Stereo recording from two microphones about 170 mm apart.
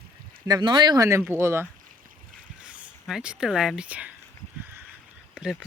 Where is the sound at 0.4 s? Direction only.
25° right (ahead or behind); by 4.1 s 10° right (ahead or behind).